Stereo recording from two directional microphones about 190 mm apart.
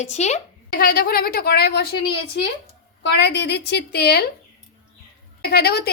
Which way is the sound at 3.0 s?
65° left (ahead or behind).